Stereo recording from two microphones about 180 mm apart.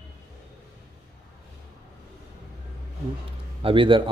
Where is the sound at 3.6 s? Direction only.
30° right (ahead or behind).